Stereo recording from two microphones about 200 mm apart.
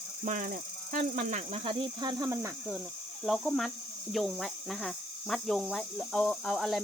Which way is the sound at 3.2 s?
Centre (ahead or behind).